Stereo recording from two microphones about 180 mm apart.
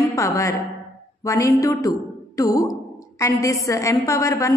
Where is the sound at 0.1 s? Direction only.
15° left (ahead or behind).